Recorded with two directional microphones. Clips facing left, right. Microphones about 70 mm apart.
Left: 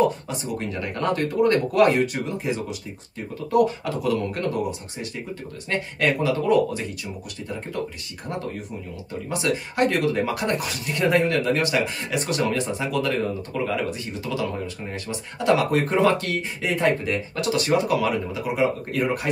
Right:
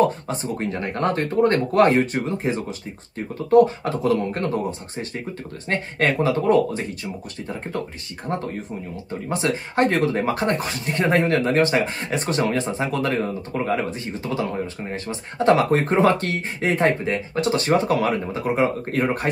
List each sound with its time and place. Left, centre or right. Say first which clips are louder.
0.3 s speech: right 3 dB; right
9.3 s speech: right 2 dB; right